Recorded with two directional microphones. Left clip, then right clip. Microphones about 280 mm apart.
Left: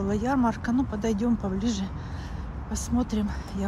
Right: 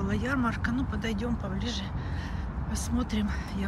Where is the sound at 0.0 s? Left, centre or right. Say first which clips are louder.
Left 4 dB; centre.